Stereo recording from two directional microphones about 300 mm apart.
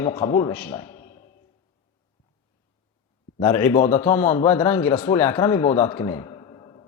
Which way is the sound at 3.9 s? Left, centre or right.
Centre.